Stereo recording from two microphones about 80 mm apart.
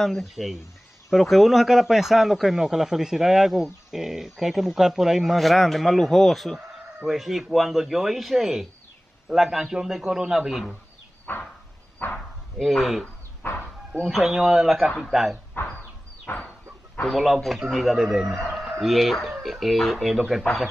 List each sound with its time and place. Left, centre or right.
0.0 s a man's voice: centre
11.3 s a sound: left
12.0 s speech: left
12.5 s a man's voice: centre
13.4 s bow-wow: left
14.0 s a man's voice: centre
15.6 s speech: left
16.3 s a sound: left
17.1 s a man's voice: centre